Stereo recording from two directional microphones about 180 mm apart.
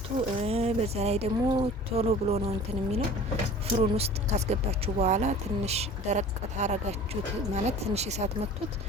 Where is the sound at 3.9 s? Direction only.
35° right (ahead or behind).